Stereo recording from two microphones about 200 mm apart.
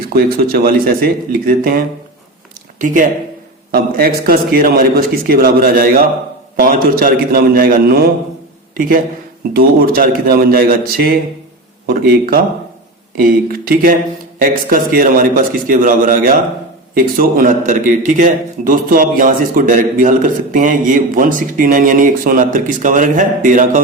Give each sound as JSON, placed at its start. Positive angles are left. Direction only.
{"t": 0.0, "sound": "a man's voice", "side_deg": -50}